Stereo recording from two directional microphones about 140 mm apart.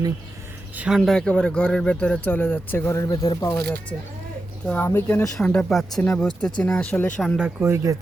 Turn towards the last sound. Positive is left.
turn(degrees=-20)  # may be behind; listen again after turning